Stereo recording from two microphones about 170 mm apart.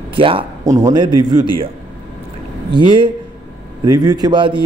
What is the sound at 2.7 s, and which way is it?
Speech, 30° right (ahead or behind).